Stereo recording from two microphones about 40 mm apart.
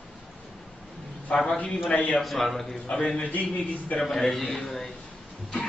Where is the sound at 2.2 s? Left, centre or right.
Centre.